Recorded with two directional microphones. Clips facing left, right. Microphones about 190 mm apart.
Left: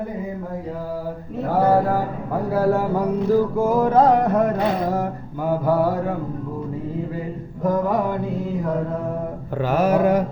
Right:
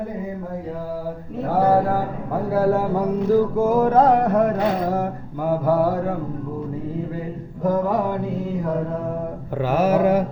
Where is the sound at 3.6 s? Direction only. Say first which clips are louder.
Even; 50° right (ahead or behind).